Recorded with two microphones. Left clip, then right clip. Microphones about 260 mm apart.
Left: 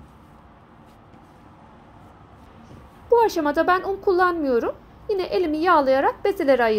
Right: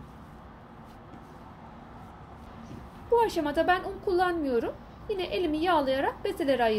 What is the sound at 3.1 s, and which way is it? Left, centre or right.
Speech, centre.